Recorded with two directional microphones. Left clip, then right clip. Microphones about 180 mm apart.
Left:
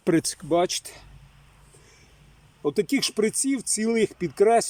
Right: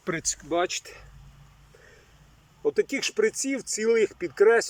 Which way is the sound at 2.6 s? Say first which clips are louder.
Left 1 dB; 25° left (ahead or behind).